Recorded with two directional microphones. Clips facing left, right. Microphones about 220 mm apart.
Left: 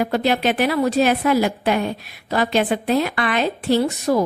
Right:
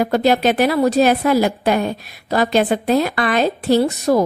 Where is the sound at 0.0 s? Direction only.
40° right (ahead or behind).